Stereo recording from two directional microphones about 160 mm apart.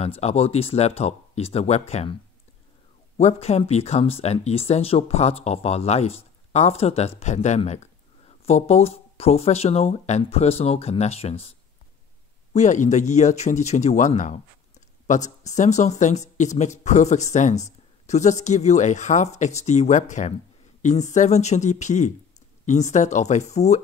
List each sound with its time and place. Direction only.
0.0 s speech: 40° left (ahead or behind)
3.2 s speech: 40° left (ahead or behind)
12.5 s speech: 50° left (ahead or behind)